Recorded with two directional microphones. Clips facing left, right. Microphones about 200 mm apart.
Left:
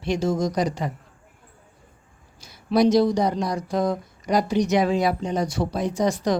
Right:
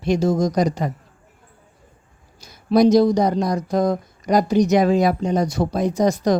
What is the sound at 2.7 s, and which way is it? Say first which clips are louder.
Speech: right 4 dB; 45° right (ahead or behind).